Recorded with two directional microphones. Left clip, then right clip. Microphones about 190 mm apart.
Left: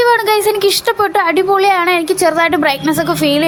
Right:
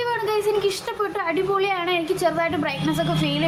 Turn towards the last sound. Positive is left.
turn(degrees=40)  # may be behind; listen again after turning